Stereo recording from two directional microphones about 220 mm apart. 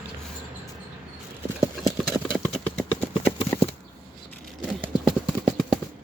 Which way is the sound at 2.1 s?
20° left (ahead or behind).